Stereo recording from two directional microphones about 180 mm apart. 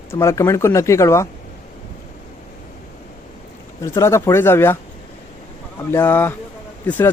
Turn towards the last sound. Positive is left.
turn(degrees=10)  # may be behind; listen again after turning